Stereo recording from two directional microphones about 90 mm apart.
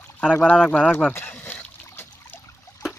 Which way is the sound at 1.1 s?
25° left (ahead or behind).